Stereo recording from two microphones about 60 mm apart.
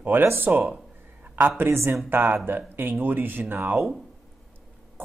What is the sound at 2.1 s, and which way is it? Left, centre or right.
Speech, right.